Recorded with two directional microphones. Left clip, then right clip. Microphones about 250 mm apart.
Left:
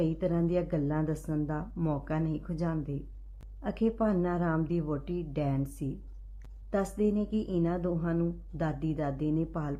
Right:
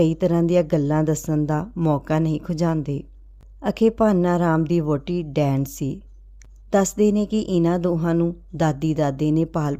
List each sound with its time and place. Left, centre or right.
0.0 s speech: right